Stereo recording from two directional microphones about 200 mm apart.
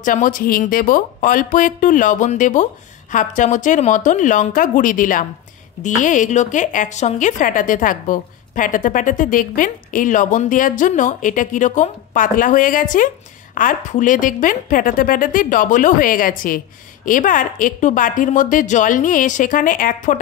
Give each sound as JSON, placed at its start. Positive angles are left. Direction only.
{"t": 0.0, "sound": "a woman's voice", "side_deg": 40}